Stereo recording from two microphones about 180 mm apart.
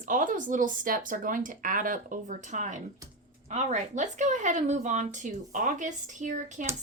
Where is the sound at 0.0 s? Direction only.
45° right (ahead or behind).